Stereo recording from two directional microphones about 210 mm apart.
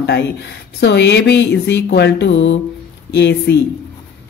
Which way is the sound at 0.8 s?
55° left (ahead or behind).